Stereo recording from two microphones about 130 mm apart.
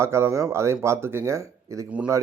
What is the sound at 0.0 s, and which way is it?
Speech, 20° right (ahead or behind).